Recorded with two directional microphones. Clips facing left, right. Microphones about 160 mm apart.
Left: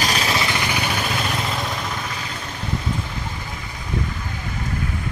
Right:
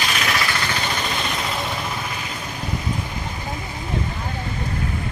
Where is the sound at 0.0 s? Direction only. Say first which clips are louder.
Left 2 dB; 30° left (ahead or behind); by 1.0 s 10° left (ahead or behind).